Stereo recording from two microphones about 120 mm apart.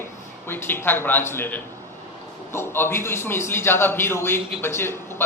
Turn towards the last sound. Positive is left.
turn(degrees=20)  # may be behind; listen again after turning